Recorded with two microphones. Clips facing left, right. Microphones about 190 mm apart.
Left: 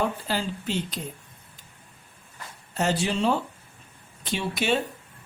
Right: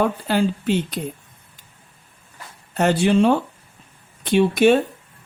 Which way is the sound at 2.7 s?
60° right (ahead or behind).